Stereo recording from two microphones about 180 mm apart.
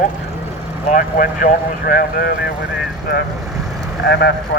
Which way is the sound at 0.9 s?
50° left (ahead or behind).